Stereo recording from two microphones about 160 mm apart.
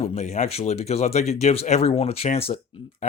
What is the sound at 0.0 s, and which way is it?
Speech, 40° left (ahead or behind).